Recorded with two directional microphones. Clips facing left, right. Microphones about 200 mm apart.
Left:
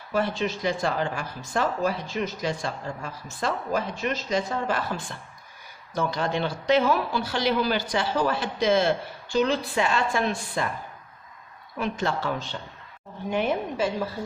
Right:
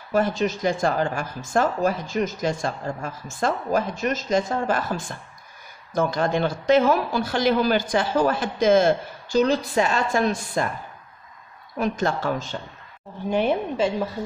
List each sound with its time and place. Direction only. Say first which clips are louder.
0.1 s speech: right 4 dB; 45° right (ahead or behind)
11.8 s speech: right 4 dB; 45° right (ahead or behind)
13.3 s a woman's voice: right 4 dB; 35° right (ahead or behind)